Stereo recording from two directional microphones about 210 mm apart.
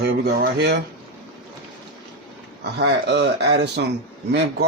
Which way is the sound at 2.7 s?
55° right (ahead or behind).